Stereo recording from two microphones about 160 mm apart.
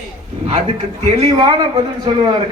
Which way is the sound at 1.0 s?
35° right (ahead or behind).